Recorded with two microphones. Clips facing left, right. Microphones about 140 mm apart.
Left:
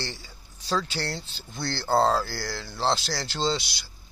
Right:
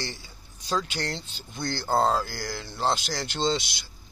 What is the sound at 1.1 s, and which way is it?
Speech, 15° right (ahead or behind).